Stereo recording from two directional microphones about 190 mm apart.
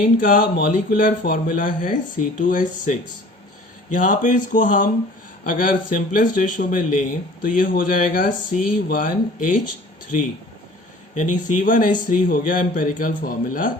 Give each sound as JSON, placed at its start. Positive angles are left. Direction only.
{"t": 0.2, "sound": "speech", "side_deg": 45}
{"t": 11.1, "sound": "speech", "side_deg": 40}